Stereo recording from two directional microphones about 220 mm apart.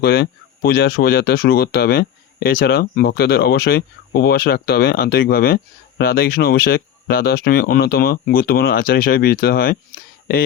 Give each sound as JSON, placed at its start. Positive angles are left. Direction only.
{"t": 0.0, "sound": "speech", "side_deg": 45}